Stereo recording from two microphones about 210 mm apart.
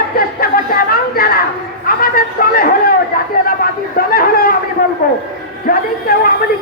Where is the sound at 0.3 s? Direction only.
45° left (ahead or behind).